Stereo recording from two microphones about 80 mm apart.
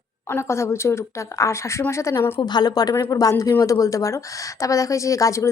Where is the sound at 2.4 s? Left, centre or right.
Left.